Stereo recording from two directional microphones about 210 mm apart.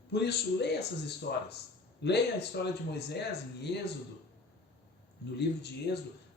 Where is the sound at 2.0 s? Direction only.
55° left (ahead or behind).